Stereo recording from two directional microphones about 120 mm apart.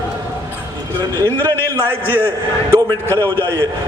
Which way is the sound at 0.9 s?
15° left (ahead or behind).